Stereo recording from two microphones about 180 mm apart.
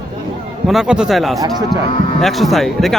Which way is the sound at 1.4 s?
20° right (ahead or behind).